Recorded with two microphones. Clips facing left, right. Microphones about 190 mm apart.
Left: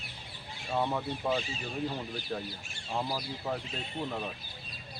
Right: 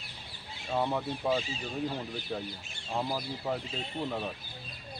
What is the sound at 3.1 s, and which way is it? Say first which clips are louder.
Speech: right 1 dB; 5° right (ahead or behind).